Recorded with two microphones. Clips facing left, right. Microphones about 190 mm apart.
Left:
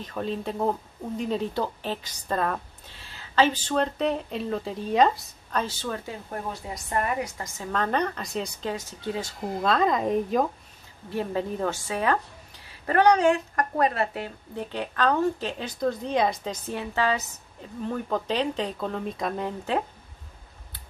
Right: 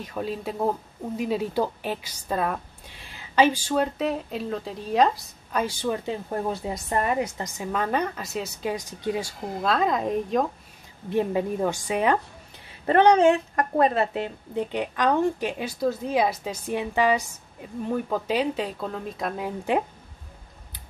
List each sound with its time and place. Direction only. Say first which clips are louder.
0.0 s a woman's voice: even; 5° right (ahead or behind)
5.6 s a woman's voice: right 4 dB; 15° right (ahead or behind)
6.7 s a woman's voice: even; 25° right (ahead or behind); by 8.7 s 5° right (ahead or behind)
8.7 s a woman's voice: right 3 dB; 15° right (ahead or behind)
9.6 s a woman's voice: even; centre (ahead or behind)
11.1 s a woman's voice: right 4 dB; 15° right (ahead or behind)